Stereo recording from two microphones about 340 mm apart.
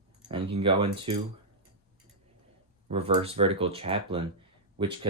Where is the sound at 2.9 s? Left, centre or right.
Centre.